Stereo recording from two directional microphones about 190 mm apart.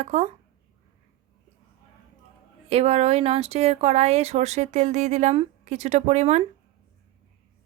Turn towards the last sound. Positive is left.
turn(degrees=-35)  # may be behind; listen again after turning